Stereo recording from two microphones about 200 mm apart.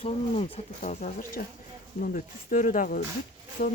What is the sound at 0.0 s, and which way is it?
Speech, 30° left (ahead or behind).